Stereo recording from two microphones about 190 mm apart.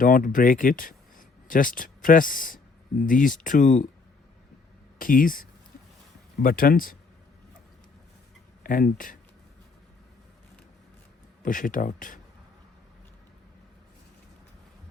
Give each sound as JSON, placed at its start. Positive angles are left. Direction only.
{"t": 0.0, "sound": "speech", "side_deg": 45}
{"t": 4.9, "sound": "speech", "side_deg": 45}
{"t": 8.6, "sound": "speech", "side_deg": 45}
{"t": 11.4, "sound": "speech", "side_deg": 45}